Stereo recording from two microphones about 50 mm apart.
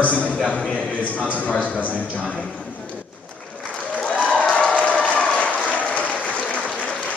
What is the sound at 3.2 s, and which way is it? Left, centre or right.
Applause, left.